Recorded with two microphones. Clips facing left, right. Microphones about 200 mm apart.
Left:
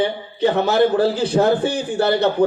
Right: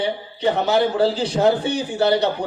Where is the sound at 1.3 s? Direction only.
55° left (ahead or behind).